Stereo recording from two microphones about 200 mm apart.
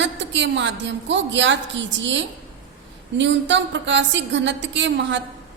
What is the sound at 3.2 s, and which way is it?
A woman's voice, 65° right (ahead or behind).